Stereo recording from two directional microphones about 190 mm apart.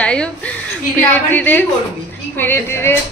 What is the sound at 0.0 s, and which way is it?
Speech, 5° left (ahead or behind).